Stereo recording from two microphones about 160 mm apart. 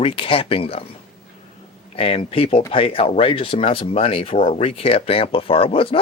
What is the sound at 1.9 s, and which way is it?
A man's voice, 35° left (ahead or behind).